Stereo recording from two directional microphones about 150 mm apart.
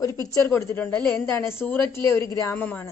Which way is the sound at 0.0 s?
25° left (ahead or behind).